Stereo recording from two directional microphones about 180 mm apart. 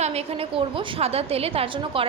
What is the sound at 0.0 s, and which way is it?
A woman's voice, 35° right (ahead or behind).